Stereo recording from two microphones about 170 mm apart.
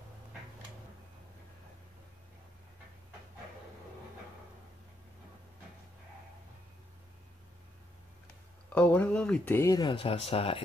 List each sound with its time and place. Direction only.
8.7 s speech: 10° left (ahead or behind); by 10.6 s 35° left (ahead or behind)